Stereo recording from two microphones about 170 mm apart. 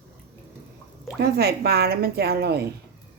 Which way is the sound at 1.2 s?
70° right (ahead or behind).